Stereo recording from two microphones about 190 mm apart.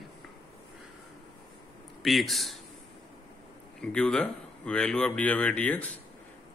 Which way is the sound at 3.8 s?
5° left (ahead or behind).